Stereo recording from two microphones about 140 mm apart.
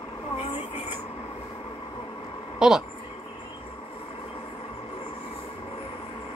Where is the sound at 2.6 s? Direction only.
5° right (ahead or behind).